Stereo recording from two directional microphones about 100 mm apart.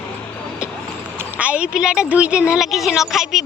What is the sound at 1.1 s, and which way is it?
A woman's voice, 15° right (ahead or behind).